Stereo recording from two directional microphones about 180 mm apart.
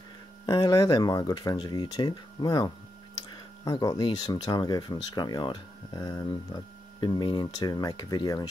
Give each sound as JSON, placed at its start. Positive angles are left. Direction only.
{"t": 0.5, "sound": "speech", "side_deg": 25}